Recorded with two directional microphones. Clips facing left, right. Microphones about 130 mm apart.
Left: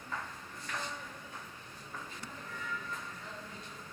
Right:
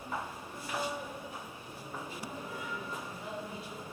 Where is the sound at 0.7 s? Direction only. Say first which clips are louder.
Right 5 dB; 10° right (ahead or behind).